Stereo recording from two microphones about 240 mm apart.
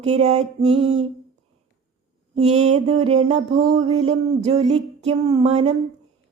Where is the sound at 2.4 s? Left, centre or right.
Right.